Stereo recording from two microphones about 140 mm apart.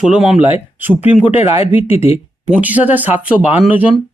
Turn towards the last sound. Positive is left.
turn(degrees=-10)  # may be behind; listen again after turning